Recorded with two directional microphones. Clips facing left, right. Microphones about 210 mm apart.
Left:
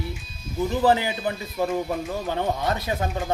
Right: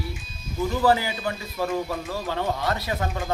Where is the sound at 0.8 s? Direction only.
20° left (ahead or behind).